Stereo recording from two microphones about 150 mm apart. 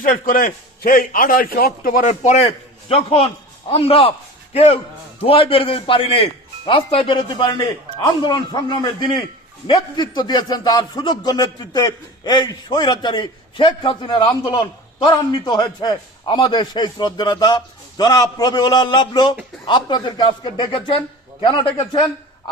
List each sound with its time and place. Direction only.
0.0 s a man's voice: 65° left (ahead or behind); by 22.0 s 35° left (ahead or behind)